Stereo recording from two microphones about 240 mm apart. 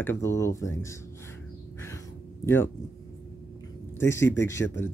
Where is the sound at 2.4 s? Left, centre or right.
Centre.